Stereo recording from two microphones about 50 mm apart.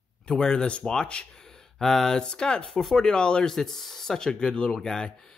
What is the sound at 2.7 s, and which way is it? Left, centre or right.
Speech, centre.